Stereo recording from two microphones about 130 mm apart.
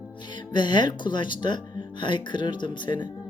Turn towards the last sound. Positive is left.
turn(degrees=35)  # may be behind; listen again after turning